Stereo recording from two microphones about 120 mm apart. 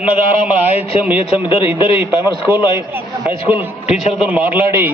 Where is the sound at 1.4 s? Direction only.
45° left (ahead or behind).